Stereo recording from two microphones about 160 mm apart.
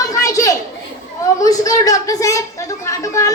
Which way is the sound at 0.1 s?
20° left (ahead or behind).